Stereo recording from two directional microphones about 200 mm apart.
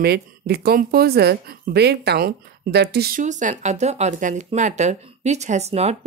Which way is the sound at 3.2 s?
35° right (ahead or behind).